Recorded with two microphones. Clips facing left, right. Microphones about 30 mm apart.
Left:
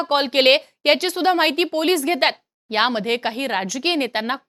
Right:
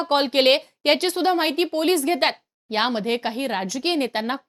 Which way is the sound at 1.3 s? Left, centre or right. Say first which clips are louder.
Left 5 dB; left.